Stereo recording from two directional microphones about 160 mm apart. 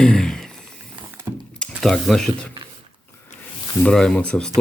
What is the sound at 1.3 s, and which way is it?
Computer keyboard, 15° right (ahead or behind).